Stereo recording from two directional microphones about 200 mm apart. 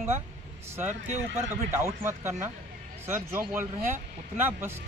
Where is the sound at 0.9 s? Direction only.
35° right (ahead or behind).